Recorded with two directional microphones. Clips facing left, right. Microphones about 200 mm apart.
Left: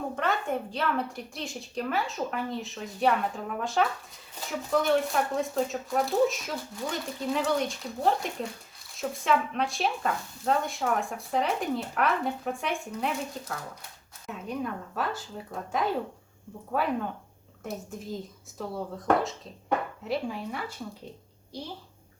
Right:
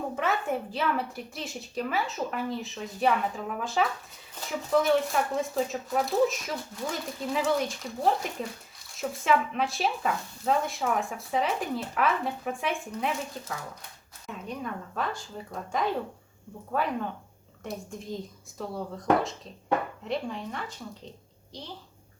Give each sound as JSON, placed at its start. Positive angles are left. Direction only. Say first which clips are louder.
{"t": 0.2, "sound": "speech", "louder": "even", "side_deg": -5}
{"t": 14.3, "sound": "speech", "louder": "left 2 dB", "side_deg": 0}